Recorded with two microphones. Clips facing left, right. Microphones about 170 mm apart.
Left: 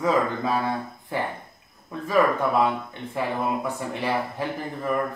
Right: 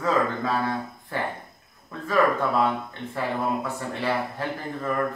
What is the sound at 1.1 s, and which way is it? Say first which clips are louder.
Speech: left 1 dB; 15° left (ahead or behind).